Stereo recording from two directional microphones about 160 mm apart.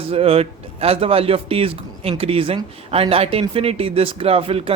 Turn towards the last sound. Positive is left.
turn(degrees=-35)  # may be behind; listen again after turning